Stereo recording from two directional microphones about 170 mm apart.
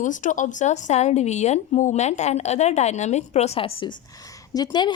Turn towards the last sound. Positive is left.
turn(degrees=25)  # may be behind; listen again after turning